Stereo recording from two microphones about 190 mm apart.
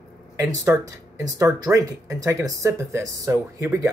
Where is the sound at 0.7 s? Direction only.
15° right (ahead or behind).